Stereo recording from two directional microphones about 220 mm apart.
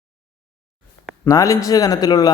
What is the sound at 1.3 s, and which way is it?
Speech, 15° left (ahead or behind).